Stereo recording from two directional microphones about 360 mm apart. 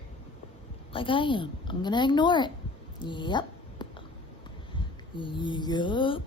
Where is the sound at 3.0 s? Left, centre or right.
Centre.